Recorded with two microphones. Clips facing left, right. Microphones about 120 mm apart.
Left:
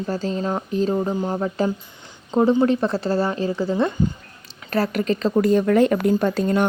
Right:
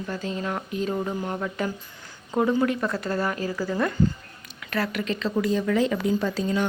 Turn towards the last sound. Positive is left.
turn(degrees=55)  # may be behind; listen again after turning